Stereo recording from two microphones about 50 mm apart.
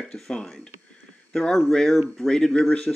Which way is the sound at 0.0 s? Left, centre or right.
Centre.